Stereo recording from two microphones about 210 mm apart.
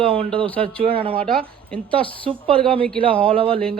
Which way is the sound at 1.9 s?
25° right (ahead or behind).